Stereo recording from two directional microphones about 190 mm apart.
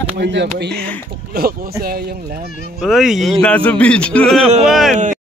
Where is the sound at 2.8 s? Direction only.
Centre (ahead or behind).